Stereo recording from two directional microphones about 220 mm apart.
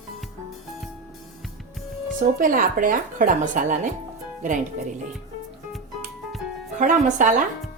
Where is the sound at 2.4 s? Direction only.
40° right (ahead or behind).